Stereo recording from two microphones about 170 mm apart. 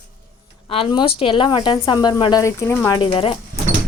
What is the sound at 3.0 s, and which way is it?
Speech, 30° left (ahead or behind).